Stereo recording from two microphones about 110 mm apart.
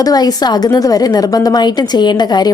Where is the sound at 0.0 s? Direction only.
35° left (ahead or behind).